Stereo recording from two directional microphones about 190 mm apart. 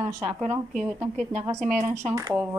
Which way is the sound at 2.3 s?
10° right (ahead or behind).